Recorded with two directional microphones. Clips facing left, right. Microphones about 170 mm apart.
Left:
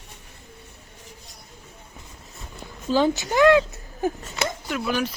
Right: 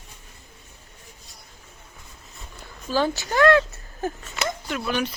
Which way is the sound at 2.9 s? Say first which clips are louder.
Left 3 dB; 20° left (ahead or behind).